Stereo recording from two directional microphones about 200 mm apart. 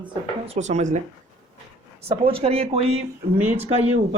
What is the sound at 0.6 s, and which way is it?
Speech, 35° right (ahead or behind).